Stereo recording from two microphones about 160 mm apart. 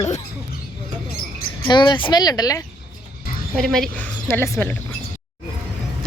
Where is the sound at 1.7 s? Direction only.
30° left (ahead or behind).